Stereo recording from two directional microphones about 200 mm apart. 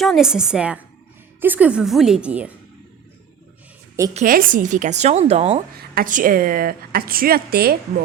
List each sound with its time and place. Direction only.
0.0 s a woman's voice: centre (ahead or behind)
4.1 s a woman's voice: 40° right (ahead or behind)
5.7 s a woman's voice: 50° right (ahead or behind)